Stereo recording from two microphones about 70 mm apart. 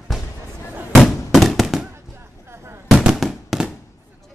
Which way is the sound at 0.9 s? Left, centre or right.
Centre.